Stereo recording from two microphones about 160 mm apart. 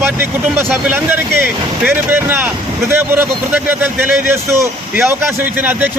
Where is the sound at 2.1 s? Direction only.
10° right (ahead or behind).